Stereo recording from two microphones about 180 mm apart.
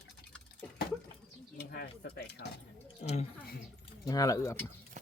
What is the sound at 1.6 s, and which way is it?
Speech, 65° left (ahead or behind).